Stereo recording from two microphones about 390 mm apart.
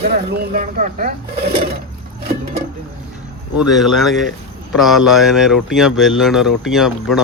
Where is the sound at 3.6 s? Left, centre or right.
Centre.